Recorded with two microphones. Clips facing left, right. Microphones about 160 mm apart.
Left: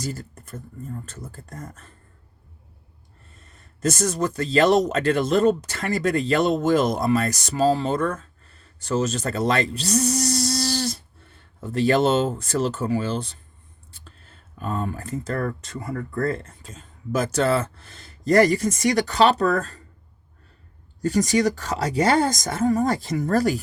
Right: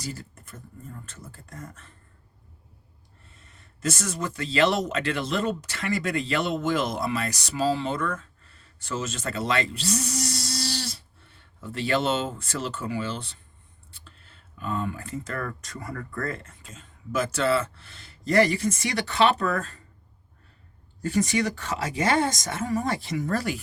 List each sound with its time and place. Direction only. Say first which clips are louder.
0.0 s speech: left 5 dB; 45° left (ahead or behind)
3.4 s speech: left 5 dB; 40° left (ahead or behind)
21.0 s speech: left 5 dB; 40° left (ahead or behind)